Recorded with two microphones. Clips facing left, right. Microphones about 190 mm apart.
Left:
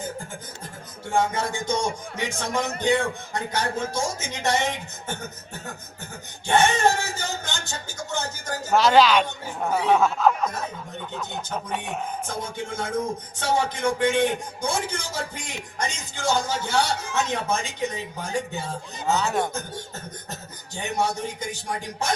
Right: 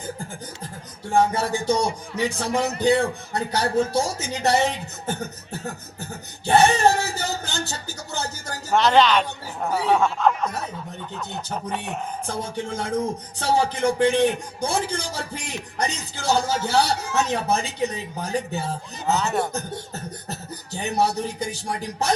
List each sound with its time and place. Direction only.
1.0 s music: 35° right (ahead or behind)
8.7 s speech: centre (ahead or behind)
12.3 s music: 35° right (ahead or behind)
19.2 s speech: 5° right (ahead or behind)
20.3 s music: 35° right (ahead or behind)